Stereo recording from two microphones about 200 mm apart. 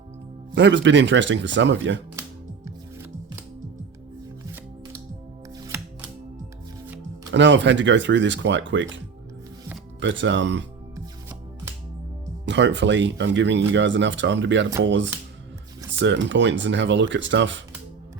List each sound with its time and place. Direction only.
0.5 s speech: 65° right (ahead or behind)
5.5 s music: 15° right (ahead or behind)
7.3 s speech: 65° right (ahead or behind)
10.0 s speech: 65° right (ahead or behind)
10.9 s shuffling cards: 15° right (ahead or behind)
12.5 s speech: 65° right (ahead or behind)